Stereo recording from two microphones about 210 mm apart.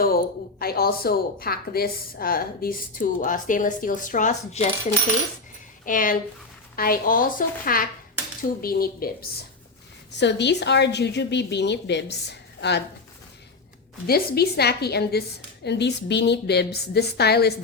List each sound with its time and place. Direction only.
0.0 s a woman's voice: 45° left (ahead or behind)
5.8 s a woman's voice: 40° left (ahead or behind)
10.1 s speech: 55° left (ahead or behind)
14.1 s a woman's voice: 45° left (ahead or behind)